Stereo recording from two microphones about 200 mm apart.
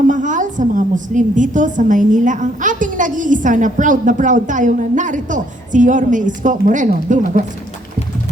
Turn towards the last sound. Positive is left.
turn(degrees=-40)  # may be behind; listen again after turning